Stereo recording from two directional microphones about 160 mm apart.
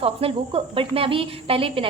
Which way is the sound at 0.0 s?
35° right (ahead or behind).